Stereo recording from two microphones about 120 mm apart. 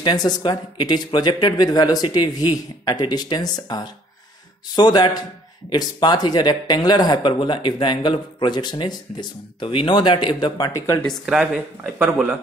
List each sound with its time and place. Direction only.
0.0 s speech: 35° left (ahead or behind)
11.2 s speech: 5° right (ahead or behind)